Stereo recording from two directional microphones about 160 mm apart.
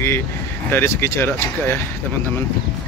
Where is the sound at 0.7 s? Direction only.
15° left (ahead or behind).